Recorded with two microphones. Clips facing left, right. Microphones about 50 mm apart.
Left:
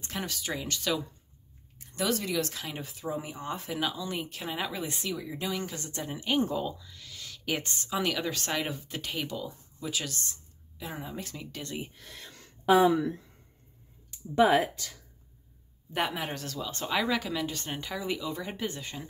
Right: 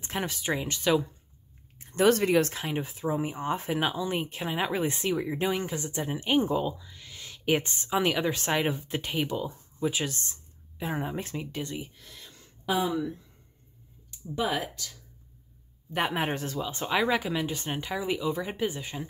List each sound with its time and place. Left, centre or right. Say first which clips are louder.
0.0 s speech: right 4 dB; right
1.8 s a sound: right 7 dB; right
2.0 s speech: right 8 dB; right
5.6 s speech: right 4 dB; centre
12.0 s a sound: left 2 dB; left
12.6 s speech: left 6 dB; left
14.3 s speech: left 7 dB; left
16.1 s speech: right 5 dB; right; by 19.0 s centre